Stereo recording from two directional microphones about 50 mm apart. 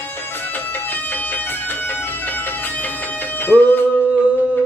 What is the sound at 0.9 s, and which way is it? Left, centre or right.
Music, left.